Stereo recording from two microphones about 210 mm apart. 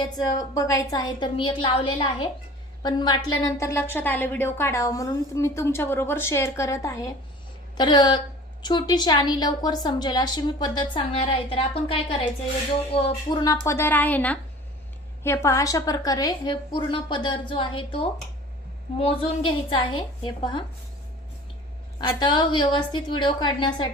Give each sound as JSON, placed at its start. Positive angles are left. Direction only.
{"t": 0.0, "sound": "a woman's voice", "side_deg": 20}
{"t": 22.2, "sound": "a woman's voice", "side_deg": 20}